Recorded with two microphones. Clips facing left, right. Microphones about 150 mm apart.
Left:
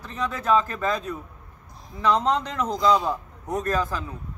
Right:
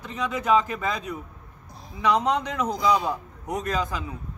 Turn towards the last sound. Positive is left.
turn(degrees=-15)  # may be behind; listen again after turning